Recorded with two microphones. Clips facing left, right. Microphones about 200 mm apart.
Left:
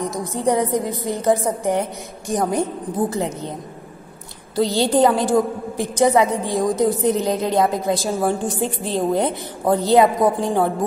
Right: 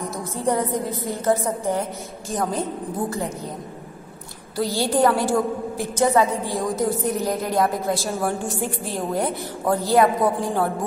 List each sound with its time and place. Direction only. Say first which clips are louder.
0.1 s a woman's voice: left 1 dB; 15° left (ahead or behind)
4.6 s a woman's voice: left 4 dB; 20° left (ahead or behind)